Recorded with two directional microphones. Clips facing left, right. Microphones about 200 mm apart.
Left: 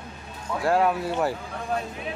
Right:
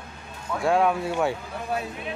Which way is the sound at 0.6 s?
Centre (ahead or behind).